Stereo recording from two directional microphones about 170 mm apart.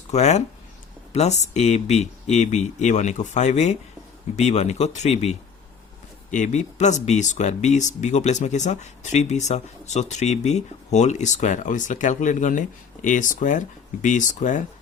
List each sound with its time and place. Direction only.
0.1 s speech: 40° left (ahead or behind)